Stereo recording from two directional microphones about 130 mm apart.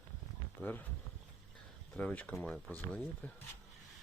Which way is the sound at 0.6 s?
20° left (ahead or behind).